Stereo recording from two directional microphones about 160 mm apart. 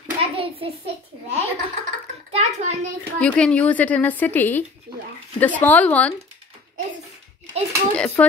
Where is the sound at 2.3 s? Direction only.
45° right (ahead or behind).